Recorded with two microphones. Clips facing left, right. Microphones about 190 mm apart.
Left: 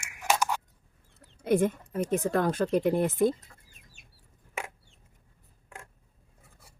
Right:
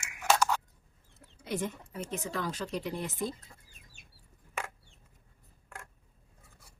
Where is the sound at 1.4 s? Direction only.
55° left (ahead or behind).